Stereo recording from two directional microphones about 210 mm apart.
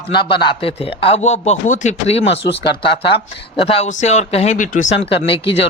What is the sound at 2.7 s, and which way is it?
Speech, 25° left (ahead or behind).